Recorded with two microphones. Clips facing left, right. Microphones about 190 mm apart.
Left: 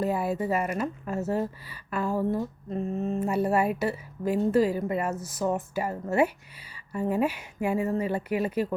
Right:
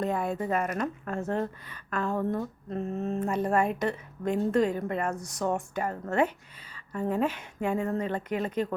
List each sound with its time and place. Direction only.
0.0 s speech: 5° left (ahead or behind)